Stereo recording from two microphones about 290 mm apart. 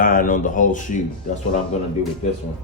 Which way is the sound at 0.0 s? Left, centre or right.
Left.